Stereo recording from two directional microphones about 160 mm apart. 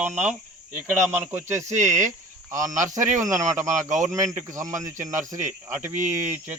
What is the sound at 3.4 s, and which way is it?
Speech, 50° right (ahead or behind).